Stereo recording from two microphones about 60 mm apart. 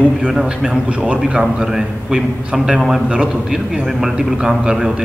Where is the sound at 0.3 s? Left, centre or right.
Centre.